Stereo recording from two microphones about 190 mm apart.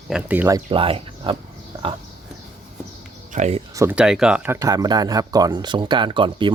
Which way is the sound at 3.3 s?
35° right (ahead or behind).